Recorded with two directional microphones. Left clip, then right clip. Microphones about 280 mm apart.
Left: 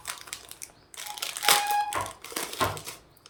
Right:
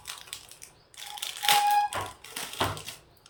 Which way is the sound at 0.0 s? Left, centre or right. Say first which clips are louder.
Left 3 dB; centre.